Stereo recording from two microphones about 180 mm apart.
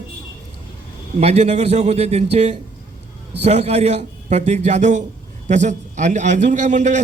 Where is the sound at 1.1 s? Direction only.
40° right (ahead or behind).